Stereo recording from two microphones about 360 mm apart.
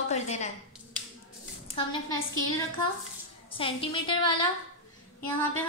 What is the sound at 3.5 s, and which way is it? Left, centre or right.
Speech, centre.